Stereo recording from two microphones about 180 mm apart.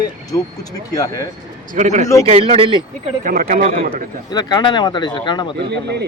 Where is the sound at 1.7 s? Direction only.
40° right (ahead or behind).